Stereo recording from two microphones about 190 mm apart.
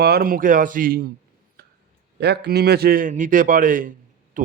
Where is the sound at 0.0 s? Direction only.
55° right (ahead or behind).